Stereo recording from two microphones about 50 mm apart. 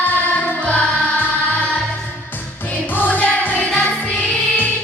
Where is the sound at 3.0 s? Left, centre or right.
Left.